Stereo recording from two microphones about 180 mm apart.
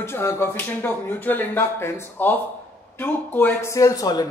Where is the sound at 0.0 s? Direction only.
15° left (ahead or behind).